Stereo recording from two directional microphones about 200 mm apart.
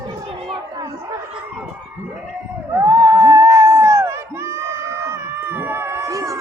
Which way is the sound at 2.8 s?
20° right (ahead or behind).